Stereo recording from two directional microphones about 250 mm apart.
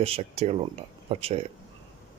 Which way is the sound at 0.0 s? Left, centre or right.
Right.